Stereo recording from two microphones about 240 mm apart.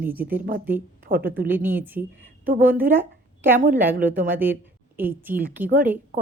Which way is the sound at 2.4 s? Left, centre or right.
Right.